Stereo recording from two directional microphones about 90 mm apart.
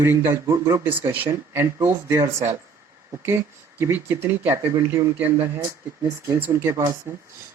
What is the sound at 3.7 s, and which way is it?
Speech, 25° right (ahead or behind).